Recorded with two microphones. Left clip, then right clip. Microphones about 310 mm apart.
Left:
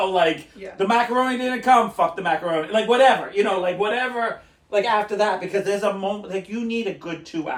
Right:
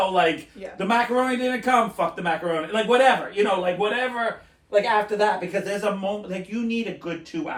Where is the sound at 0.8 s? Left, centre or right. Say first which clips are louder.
Left 2 dB; centre.